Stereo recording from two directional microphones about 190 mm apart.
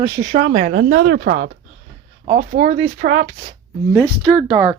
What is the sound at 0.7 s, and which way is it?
Speech, 60° right (ahead or behind).